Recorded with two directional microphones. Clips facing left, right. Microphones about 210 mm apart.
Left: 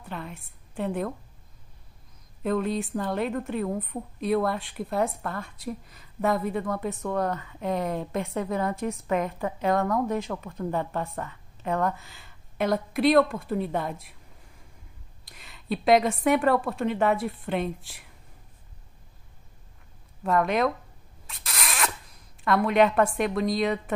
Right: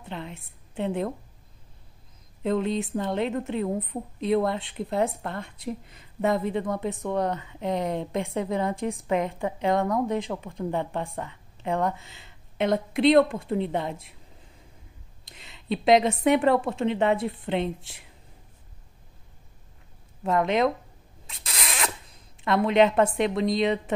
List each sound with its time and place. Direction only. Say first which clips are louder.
0.0 s a sound: right 1 dB; 20° right (ahead or behind)
2.4 s a woman's voice: right 1 dB; 25° right (ahead or behind)
15.2 s a woman's voice: right 1 dB; 25° right (ahead or behind)
20.2 s a woman's voice: right 1 dB; 20° right (ahead or behind)
21.3 s rodents: even; 25° right (ahead or behind)